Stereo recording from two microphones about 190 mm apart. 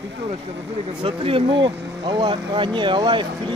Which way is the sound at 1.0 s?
30° right (ahead or behind).